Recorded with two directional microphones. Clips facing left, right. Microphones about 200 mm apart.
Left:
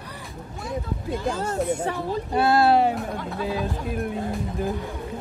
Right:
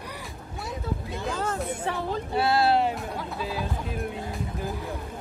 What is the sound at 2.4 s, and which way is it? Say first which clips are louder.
Speech: left 4 dB; 50° left (ahead or behind).